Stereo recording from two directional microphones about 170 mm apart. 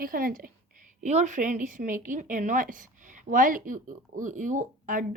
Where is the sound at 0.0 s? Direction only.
55° right (ahead or behind).